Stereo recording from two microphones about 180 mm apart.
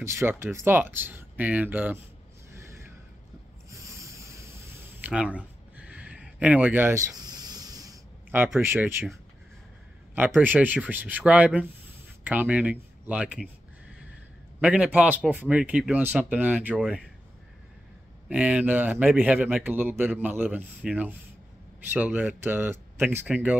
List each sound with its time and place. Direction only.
0.0 s a man's voice: 15° right (ahead or behind)
3.7 s a sound: 15° right (ahead or behind)
8.5 s a man's voice: 15° right (ahead or behind)
14.6 s a man's voice: 5° right (ahead or behind)
18.3 s a man's voice: 5° right (ahead or behind)